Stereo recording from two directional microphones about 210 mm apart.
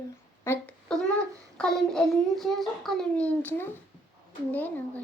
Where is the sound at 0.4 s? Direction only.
5° left (ahead or behind).